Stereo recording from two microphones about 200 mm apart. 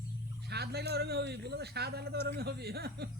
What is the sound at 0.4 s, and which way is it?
A man's voice, 55° right (ahead or behind).